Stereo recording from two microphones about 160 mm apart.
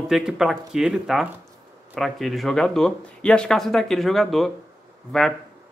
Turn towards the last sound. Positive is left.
turn(degrees=0)  # may be behind; listen again after turning